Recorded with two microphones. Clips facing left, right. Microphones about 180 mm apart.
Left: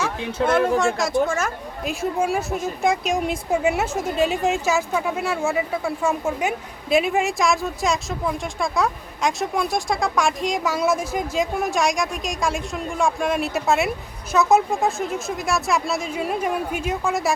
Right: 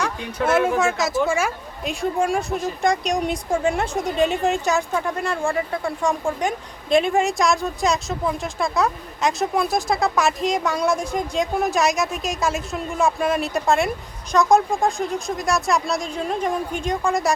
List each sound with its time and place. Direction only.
0.4 s speech: 5° right (ahead or behind)
1.8 s speech: centre (ahead or behind)